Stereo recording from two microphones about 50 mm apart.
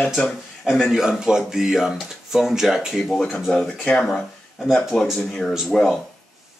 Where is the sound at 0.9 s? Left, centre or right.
Centre.